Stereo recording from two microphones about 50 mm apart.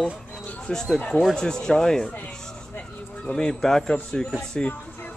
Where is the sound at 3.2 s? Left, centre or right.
Centre.